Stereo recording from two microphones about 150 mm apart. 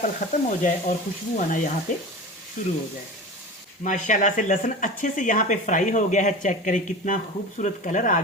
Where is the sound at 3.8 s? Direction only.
55° left (ahead or behind).